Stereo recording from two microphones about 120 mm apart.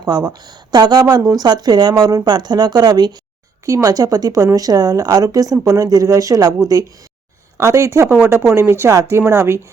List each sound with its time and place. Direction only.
0.0 s speech: 35° right (ahead or behind)